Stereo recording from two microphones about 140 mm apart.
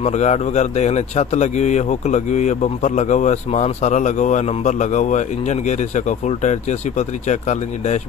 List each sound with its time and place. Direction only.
0.0 s a man's voice: 55° left (ahead or behind)